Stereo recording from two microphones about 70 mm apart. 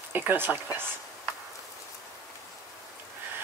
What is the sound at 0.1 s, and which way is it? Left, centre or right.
Speech, right.